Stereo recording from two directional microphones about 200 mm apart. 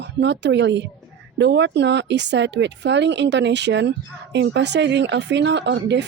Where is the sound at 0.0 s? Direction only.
60° right (ahead or behind).